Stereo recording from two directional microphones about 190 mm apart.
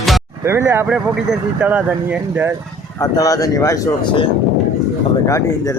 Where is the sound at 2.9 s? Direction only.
20° left (ahead or behind).